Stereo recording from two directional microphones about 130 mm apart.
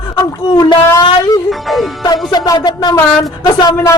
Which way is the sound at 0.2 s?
30° left (ahead or behind).